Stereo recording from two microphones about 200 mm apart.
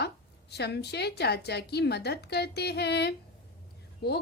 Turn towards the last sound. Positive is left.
turn(degrees=50)  # may be behind; listen again after turning